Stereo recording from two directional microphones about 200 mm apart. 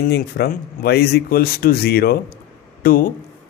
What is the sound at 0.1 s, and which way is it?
Speech, 55° left (ahead or behind).